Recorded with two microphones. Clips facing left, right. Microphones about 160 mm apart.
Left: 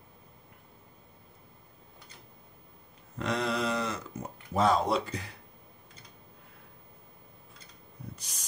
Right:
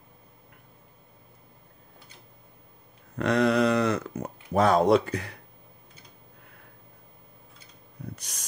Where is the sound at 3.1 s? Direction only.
60° right (ahead or behind).